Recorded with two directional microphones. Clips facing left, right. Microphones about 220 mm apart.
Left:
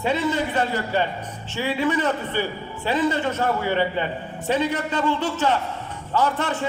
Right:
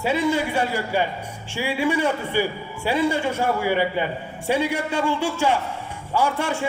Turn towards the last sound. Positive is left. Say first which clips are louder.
# even
turn(degrees=-10)  # may be behind; listen again after turning